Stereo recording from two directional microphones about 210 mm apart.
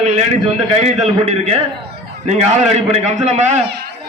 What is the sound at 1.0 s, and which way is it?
A man's voice, 30° right (ahead or behind).